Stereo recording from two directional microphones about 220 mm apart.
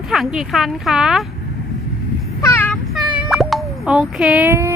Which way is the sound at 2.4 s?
10° left (ahead or behind).